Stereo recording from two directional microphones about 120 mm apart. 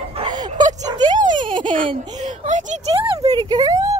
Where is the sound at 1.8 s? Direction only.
45° right (ahead or behind).